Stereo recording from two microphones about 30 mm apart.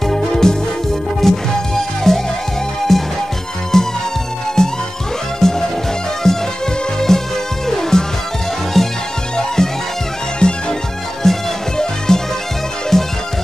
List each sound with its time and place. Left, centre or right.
0.1 s music: centre
3.7 s music: centre
5.4 s music: centre
10.4 s music: left
11.2 s music: centre